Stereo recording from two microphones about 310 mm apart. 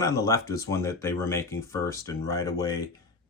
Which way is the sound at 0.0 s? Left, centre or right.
Centre.